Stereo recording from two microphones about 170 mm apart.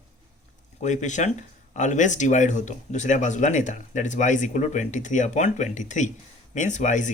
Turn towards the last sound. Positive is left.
turn(degrees=45)  # may be behind; listen again after turning